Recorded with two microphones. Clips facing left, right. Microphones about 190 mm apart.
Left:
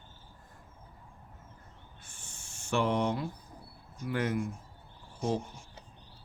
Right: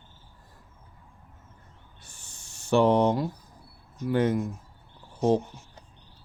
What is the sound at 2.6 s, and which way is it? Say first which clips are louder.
Speech: right 8 dB; 35° right (ahead or behind).